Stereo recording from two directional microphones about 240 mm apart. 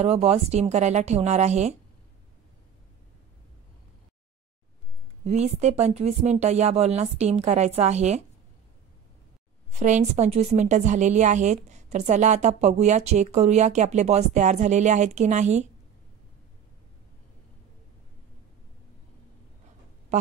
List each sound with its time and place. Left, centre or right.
0.0 s a woman's voice: right
5.2 s a woman's voice: right
9.8 s a woman's voice: right
20.1 s speech: right